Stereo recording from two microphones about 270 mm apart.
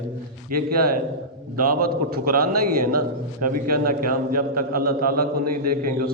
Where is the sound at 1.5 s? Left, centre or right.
Right.